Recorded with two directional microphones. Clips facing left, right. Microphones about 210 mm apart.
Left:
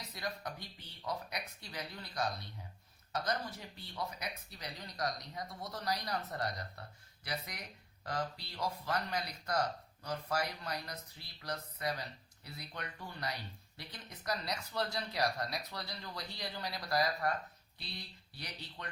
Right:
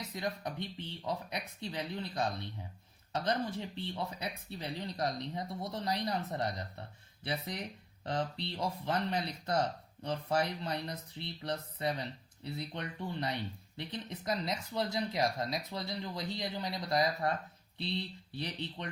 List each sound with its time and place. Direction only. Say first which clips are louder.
0.2 s speech: right 5 dB; 25° right (ahead or behind)